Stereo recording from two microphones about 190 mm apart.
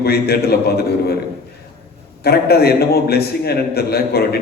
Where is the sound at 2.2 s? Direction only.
55° left (ahead or behind).